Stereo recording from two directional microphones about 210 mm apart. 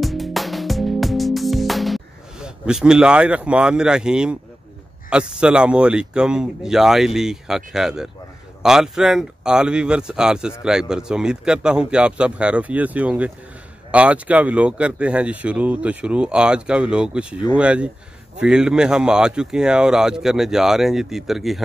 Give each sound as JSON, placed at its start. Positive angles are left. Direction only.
{"t": 0.0, "sound": "music", "side_deg": 0}
{"t": 5.1, "sound": "speech", "side_deg": -5}